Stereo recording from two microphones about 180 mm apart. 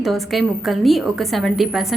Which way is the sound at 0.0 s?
Centre (ahead or behind).